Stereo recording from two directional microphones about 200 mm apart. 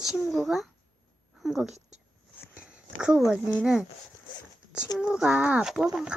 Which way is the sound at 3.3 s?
Centre (ahead or behind).